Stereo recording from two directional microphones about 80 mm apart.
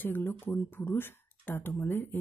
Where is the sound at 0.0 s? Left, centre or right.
Left.